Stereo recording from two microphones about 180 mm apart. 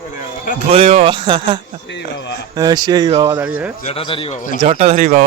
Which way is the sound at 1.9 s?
75° left (ahead or behind).